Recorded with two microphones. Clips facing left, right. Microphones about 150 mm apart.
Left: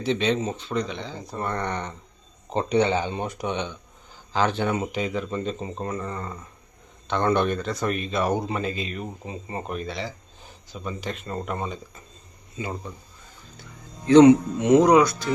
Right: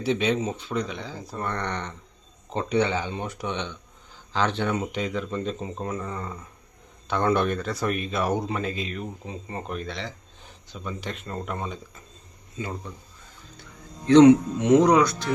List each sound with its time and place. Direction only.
0.0 s speech: 10° right (ahead or behind); by 2.0 s 5° left (ahead or behind)
2.5 s speech: 20° left (ahead or behind)
14.1 s speech: 5° left (ahead or behind)